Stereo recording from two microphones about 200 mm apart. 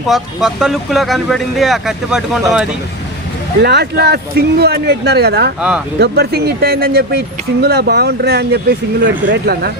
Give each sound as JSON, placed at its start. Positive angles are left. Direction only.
{"t": 0.1, "sound": "speech", "side_deg": 0}
{"t": 3.6, "sound": "speech", "side_deg": -55}
{"t": 5.5, "sound": "speech", "side_deg": -5}
{"t": 6.0, "sound": "speech", "side_deg": -55}